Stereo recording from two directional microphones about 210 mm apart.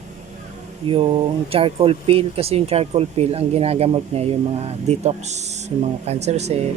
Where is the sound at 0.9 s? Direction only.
25° right (ahead or behind).